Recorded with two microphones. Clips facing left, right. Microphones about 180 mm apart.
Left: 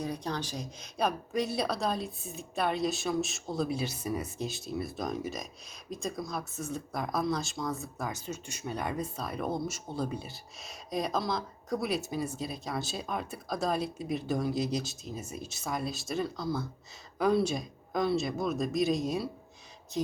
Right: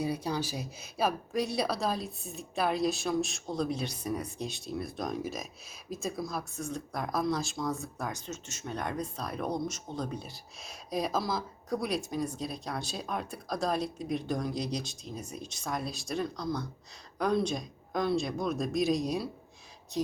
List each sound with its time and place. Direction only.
0.0 s speech: 10° right (ahead or behind)